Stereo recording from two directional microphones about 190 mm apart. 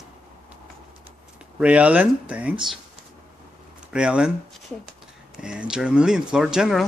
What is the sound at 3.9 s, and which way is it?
Speech, 5° right (ahead or behind).